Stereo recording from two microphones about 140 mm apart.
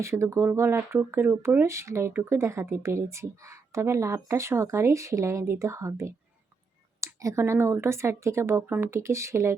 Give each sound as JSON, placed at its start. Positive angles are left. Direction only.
{"t": 0.0, "sound": "speech", "side_deg": -20}